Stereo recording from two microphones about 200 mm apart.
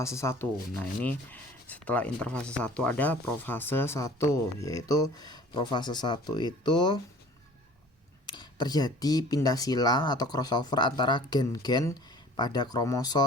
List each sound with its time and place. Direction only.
0.0 s speech: 15° left (ahead or behind)
8.3 s speech: 20° left (ahead or behind)